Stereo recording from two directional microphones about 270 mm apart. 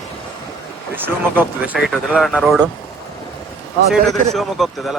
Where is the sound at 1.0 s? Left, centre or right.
Centre.